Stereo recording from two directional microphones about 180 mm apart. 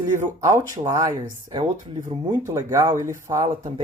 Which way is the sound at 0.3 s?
20° right (ahead or behind).